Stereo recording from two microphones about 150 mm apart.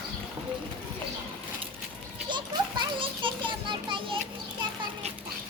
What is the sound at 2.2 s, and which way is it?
Children playing, 30° right (ahead or behind).